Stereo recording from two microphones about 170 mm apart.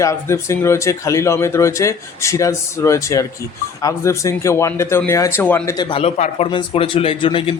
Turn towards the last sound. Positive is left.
turn(degrees=30)  # may be behind; listen again after turning